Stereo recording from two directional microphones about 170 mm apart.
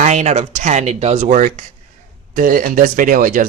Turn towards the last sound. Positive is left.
turn(degrees=-50)  # may be behind; listen again after turning